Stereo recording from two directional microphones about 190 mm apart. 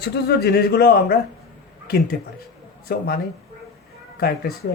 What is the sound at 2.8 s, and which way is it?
Speech, 50° left (ahead or behind).